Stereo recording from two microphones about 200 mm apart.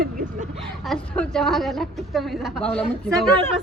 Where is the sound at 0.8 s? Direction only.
Centre (ahead or behind).